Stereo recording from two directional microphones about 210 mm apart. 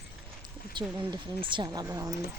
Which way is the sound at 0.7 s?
20° right (ahead or behind).